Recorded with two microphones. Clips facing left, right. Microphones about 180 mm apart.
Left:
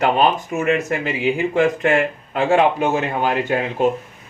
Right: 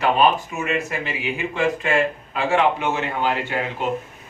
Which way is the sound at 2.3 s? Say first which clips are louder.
Left 4 dB; 40° left (ahead or behind).